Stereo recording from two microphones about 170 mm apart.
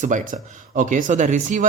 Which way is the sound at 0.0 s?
45° right (ahead or behind).